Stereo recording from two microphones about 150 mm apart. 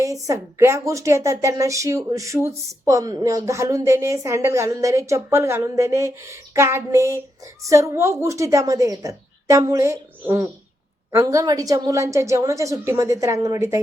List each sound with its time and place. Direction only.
0.0 s speech: 20° right (ahead or behind)